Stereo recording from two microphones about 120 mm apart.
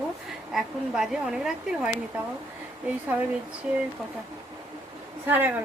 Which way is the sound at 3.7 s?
10° right (ahead or behind).